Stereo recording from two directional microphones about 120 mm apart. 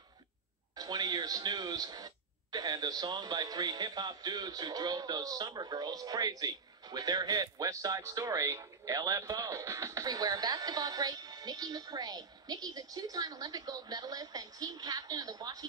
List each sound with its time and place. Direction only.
0.7 s speech: 35° right (ahead or behind)